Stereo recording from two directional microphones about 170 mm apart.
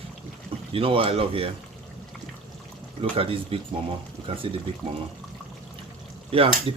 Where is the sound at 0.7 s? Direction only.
30° right (ahead or behind).